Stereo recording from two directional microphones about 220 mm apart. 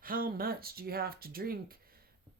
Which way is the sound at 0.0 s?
40° right (ahead or behind).